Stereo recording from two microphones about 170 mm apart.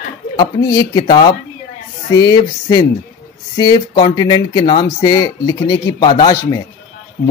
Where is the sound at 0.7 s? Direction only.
25° left (ahead or behind).